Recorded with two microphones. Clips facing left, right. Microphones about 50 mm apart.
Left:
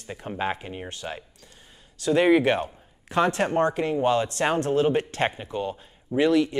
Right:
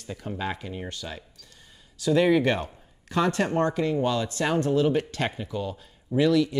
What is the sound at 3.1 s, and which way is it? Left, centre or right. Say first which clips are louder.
Speech: left 2 dB; left.